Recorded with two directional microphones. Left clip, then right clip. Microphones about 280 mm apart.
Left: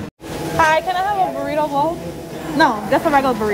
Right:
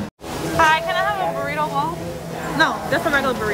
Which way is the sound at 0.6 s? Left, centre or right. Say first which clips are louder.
Left 1 dB; centre.